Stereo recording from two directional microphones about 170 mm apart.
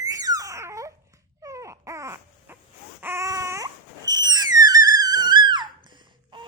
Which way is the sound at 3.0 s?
15° right (ahead or behind).